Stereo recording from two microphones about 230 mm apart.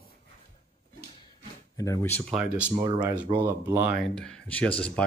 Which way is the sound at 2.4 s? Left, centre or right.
Centre.